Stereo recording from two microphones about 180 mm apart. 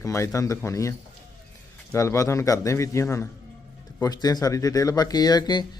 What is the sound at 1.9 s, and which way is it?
A man's voice, 15° left (ahead or behind).